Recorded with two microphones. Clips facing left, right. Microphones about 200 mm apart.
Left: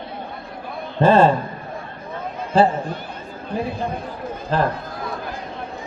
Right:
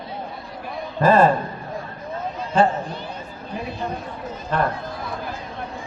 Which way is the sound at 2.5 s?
35° left (ahead or behind).